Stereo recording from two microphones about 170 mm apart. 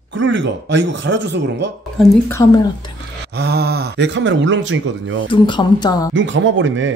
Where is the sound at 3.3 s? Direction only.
75° right (ahead or behind); by 5.3 s 90° right.